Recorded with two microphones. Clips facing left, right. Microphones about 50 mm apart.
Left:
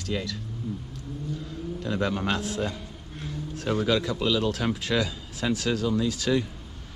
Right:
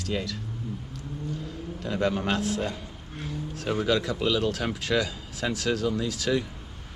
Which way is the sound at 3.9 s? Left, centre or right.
Right.